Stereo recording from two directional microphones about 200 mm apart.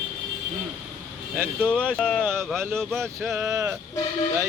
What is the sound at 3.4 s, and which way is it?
Speech, 15° right (ahead or behind).